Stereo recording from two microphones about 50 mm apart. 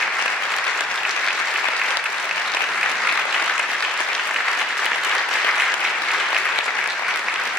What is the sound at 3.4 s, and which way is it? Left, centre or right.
Applause, centre.